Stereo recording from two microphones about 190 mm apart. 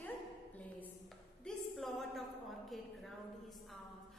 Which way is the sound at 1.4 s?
Centre (ahead or behind).